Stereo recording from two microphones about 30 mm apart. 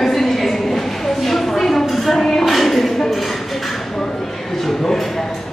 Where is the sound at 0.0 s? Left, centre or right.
Centre.